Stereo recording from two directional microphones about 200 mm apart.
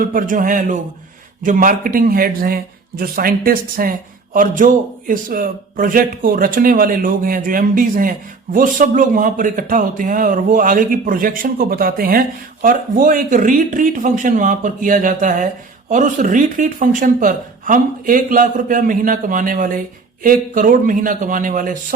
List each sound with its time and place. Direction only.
0.0 s a man's voice: 45° right (ahead or behind)